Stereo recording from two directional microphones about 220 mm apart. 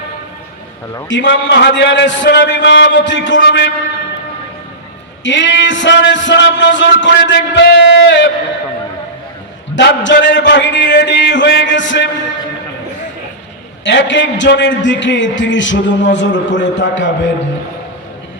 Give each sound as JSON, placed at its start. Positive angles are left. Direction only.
{"t": 1.0, "sound": "a man's voice", "side_deg": 55}
{"t": 5.2, "sound": "a man's voice", "side_deg": 55}
{"t": 9.7, "sound": "a man's voice", "side_deg": 55}
{"t": 13.8, "sound": "a man's voice", "side_deg": 55}